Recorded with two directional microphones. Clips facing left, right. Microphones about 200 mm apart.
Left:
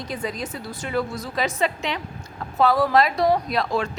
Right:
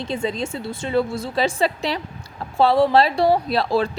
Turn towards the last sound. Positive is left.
turn(degrees=-30)  # may be behind; listen again after turning